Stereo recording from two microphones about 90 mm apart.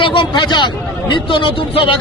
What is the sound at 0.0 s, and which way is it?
A man's voice, 70° left (ahead or behind).